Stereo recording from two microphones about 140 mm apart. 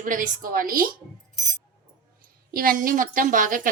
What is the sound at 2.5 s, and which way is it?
A woman's voice, 85° right.